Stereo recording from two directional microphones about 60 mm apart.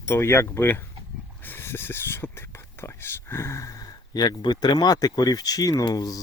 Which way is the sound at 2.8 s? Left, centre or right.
Left.